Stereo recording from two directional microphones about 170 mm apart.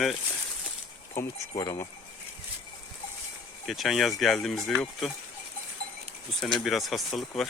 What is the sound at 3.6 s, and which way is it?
Speech, centre (ahead or behind).